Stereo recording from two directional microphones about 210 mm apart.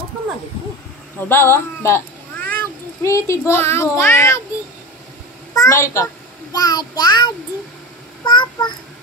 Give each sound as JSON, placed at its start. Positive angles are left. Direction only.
{"t": 1.3, "sound": "speech", "side_deg": 10}
{"t": 5.5, "sound": "a child's voice", "side_deg": 15}
{"t": 6.5, "sound": "child singing", "side_deg": 15}
{"t": 8.3, "sound": "a child's voice", "side_deg": 20}